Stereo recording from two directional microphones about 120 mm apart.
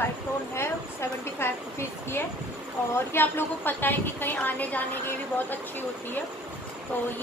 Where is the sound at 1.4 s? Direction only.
20° left (ahead or behind).